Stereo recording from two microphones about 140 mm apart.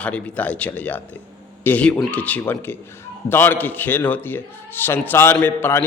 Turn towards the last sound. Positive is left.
turn(degrees=15)  # may be behind; listen again after turning